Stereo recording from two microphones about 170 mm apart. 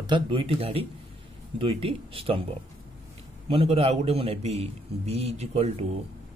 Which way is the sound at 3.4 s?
35° right (ahead or behind).